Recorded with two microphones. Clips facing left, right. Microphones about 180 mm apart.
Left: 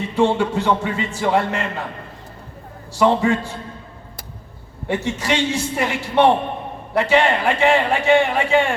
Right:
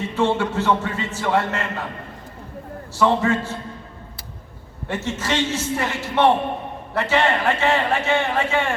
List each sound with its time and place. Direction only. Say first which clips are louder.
0.2 s a man's voice: left 3 dB; 15° left (ahead or behind)
2.9 s a man's voice: left 2 dB; 15° left (ahead or behind)
4.9 s a man's voice: left 3 dB; 15° left (ahead or behind)